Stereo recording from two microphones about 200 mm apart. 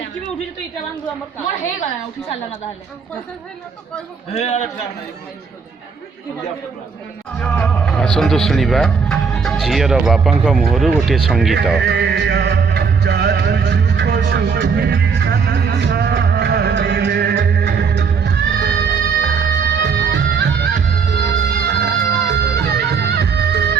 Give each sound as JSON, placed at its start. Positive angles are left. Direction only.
{"t": 4.3, "sound": "a man's voice", "side_deg": 35}
{"t": 7.3, "sound": "speech", "side_deg": 5}
{"t": 11.8, "sound": "music", "side_deg": -55}